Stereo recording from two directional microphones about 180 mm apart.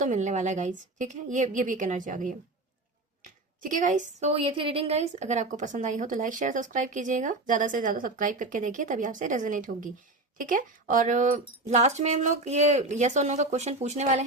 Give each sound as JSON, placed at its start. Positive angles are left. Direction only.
{"t": 0.0, "sound": "a woman's voice", "side_deg": -40}
{"t": 3.6, "sound": "a woman's voice", "side_deg": -45}